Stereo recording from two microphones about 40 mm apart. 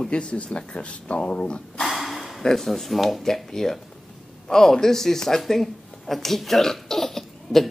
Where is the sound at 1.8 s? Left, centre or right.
Centre.